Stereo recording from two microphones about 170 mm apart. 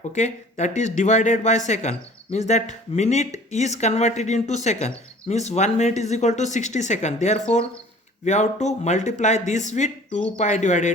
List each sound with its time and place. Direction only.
0.1 s speech: 45° left (ahead or behind)